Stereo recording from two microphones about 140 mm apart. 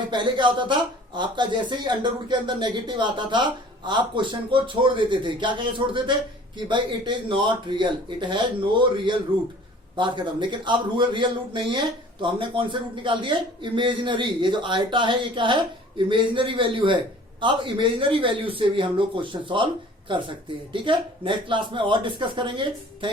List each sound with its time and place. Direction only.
0.1 s speech: 35° right (ahead or behind)